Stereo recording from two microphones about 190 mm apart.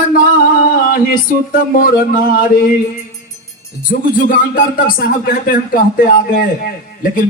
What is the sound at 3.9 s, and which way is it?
Music, 45° left (ahead or behind).